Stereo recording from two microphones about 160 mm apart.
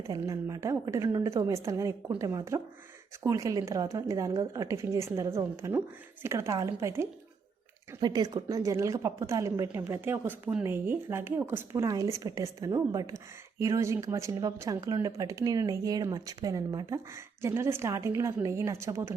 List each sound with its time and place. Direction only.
0.1 s a woman's voice: 20° right (ahead or behind)
8.0 s a woman's voice: 25° right (ahead or behind)